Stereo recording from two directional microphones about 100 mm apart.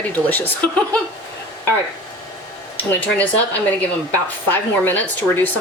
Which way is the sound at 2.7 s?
15° left (ahead or behind).